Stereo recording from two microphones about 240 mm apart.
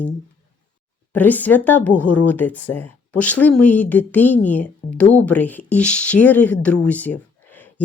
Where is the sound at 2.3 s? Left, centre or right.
Centre.